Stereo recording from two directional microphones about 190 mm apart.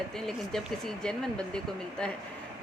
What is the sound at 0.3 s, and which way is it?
A woman's voice, centre (ahead or behind).